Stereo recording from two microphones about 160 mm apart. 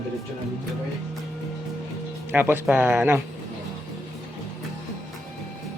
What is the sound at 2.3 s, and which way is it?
Speech, 15° right (ahead or behind).